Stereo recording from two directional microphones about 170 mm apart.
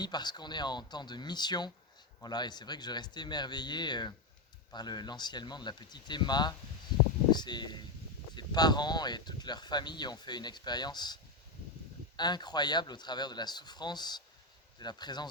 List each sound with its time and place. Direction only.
0.0 s speech: 25° left (ahead or behind)